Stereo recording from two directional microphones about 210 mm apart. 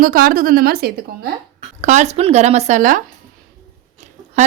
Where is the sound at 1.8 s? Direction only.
35° right (ahead or behind).